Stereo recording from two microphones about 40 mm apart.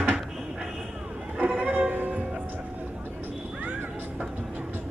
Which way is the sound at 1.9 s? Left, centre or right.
Right.